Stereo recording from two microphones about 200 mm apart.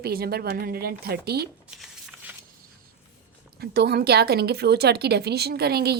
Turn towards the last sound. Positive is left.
turn(degrees=-55)  # may be behind; listen again after turning